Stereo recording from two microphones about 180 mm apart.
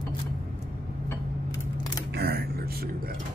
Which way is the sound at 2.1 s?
60° right (ahead or behind).